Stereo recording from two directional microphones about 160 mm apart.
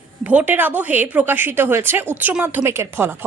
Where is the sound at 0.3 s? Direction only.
10° right (ahead or behind).